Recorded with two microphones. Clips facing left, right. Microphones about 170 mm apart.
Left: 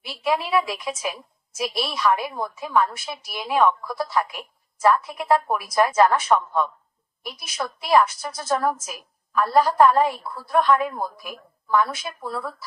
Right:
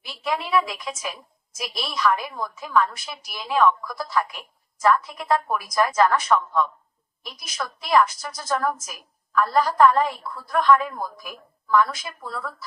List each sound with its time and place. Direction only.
0.5 s a woman's voice: 25° left (ahead or behind)